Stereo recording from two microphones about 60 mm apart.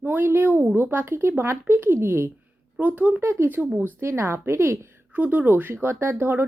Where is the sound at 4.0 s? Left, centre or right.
Right.